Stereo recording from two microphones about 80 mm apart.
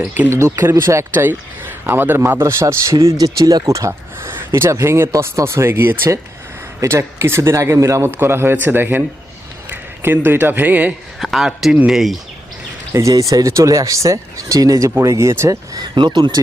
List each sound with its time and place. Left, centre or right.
0.3 s speech: right
8.1 s a man's voice: right
11.2 s speech: centre
12.9 s speech: right
15.7 s speech: right